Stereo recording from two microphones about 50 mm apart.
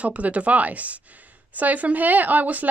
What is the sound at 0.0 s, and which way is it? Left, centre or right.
A woman's voice, right.